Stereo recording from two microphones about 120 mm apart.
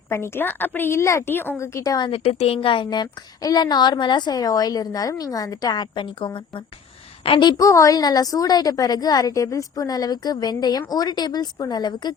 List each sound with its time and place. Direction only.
0.1 s a woman's voice: 20° left (ahead or behind)
2.0 s a woman's voice: 55° left (ahead or behind)
7.6 s a woman's voice: 25° left (ahead or behind)